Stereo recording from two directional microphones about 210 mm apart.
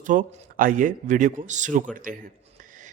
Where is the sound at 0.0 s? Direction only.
40° right (ahead or behind).